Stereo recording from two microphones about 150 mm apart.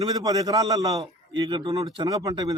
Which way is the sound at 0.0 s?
25° right (ahead or behind).